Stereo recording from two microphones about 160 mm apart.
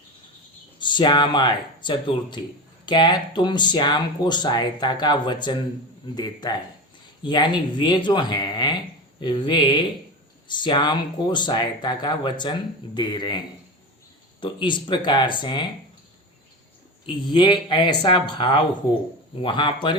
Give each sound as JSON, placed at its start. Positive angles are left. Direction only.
{"t": 0.8, "sound": "speech", "side_deg": 30}
{"t": 14.4, "sound": "speech", "side_deg": 30}
{"t": 17.2, "sound": "speech", "side_deg": 30}